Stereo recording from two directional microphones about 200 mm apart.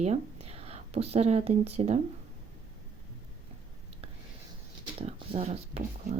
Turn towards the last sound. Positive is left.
turn(degrees=-35)  # may be behind; listen again after turning